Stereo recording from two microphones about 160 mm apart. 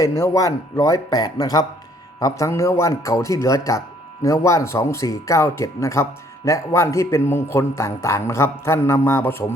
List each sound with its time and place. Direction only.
0.0 s a man's voice: 20° left (ahead or behind)